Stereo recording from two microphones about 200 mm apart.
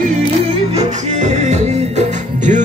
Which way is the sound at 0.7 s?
35° right (ahead or behind).